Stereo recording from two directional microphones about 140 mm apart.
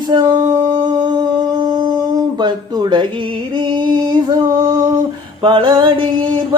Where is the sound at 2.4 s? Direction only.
35° right (ahead or behind).